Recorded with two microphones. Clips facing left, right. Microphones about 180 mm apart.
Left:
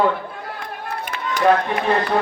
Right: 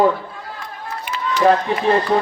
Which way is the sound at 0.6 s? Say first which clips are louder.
Left 1 dB; 60° left (ahead or behind).